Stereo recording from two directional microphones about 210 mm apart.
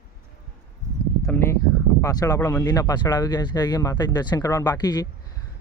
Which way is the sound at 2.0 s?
15° left (ahead or behind).